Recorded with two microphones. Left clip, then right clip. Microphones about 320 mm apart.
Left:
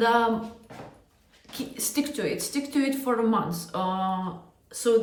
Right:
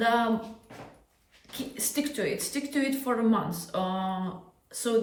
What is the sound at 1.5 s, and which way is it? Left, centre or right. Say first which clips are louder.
A woman's voice: left 2 dB; centre.